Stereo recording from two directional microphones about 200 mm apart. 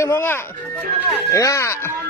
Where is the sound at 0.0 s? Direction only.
10° left (ahead or behind).